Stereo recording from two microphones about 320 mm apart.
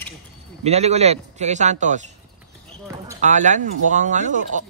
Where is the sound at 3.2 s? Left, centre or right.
Right.